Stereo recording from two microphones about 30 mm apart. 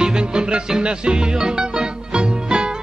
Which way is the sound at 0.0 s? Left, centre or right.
Right.